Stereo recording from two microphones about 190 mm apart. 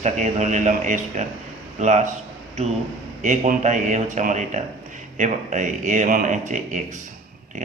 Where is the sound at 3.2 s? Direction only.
40° right (ahead or behind).